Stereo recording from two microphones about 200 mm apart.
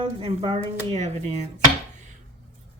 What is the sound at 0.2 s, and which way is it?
Speech, 30° right (ahead or behind).